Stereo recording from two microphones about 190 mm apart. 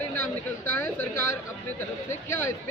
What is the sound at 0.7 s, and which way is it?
Speech, 10° left (ahead or behind).